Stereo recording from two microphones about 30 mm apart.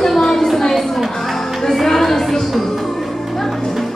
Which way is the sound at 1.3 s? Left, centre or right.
Centre.